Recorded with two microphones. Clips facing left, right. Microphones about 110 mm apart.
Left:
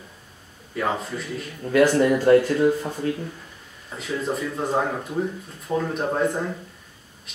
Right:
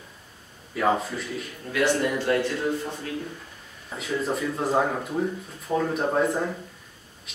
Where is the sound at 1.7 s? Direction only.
40° left (ahead or behind).